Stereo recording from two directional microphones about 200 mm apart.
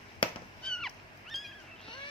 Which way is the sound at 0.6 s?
5° left (ahead or behind).